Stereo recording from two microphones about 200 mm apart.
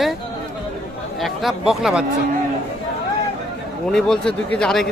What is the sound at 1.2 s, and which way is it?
Speech, centre (ahead or behind).